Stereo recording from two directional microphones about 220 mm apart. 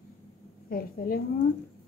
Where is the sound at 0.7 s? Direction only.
40° left (ahead or behind).